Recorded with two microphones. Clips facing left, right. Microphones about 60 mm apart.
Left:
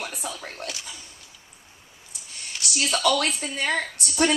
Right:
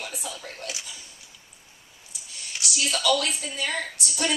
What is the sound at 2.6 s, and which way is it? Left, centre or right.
A woman's voice, left.